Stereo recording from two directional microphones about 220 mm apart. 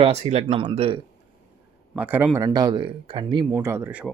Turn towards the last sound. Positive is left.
turn(degrees=-10)  # may be behind; listen again after turning